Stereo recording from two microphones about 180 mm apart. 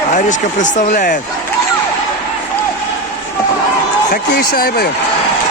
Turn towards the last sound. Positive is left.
turn(degrees=55)  # may be behind; listen again after turning